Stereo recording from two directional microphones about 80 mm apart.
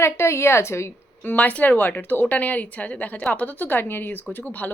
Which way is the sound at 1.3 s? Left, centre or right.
Centre.